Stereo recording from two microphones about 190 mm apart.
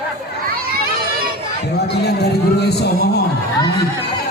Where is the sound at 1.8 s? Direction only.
60° left (ahead or behind).